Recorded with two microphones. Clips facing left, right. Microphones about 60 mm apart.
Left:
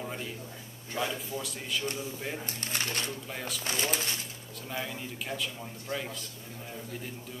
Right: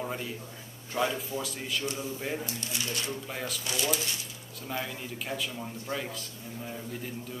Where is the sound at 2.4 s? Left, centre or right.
Left.